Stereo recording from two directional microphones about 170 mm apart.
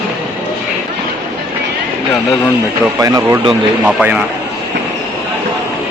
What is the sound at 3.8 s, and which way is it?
Speech, 5° right (ahead or behind).